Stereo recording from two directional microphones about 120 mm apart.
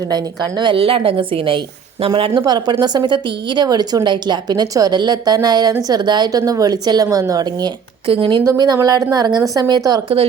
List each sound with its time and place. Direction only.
0.1 s a woman's voice: 40° right (ahead or behind)
8.0 s a woman's voice: 50° right (ahead or behind)
8.4 s a woman's voice: 35° right (ahead or behind)